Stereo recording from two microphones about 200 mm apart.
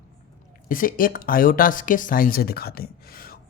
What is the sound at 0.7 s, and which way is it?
Speech, 45° left (ahead or behind).